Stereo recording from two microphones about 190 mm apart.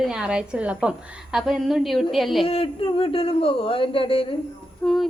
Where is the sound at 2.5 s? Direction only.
30° left (ahead or behind).